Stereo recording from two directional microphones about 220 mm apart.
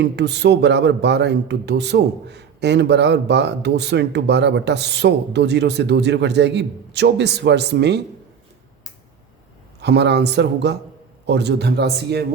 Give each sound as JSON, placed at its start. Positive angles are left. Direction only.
{"t": 0.0, "sound": "a man's voice", "side_deg": -50}
{"t": 9.8, "sound": "a man's voice", "side_deg": -50}